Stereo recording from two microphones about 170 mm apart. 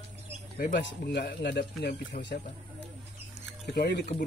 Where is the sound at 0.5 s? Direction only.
70° left (ahead or behind).